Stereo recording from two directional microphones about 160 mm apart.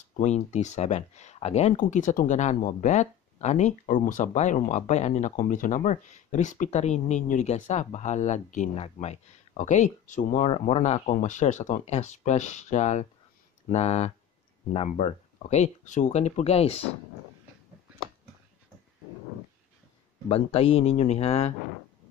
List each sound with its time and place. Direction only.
0.2 s speech: 45° left (ahead or behind)
20.2 s speech: 35° left (ahead or behind)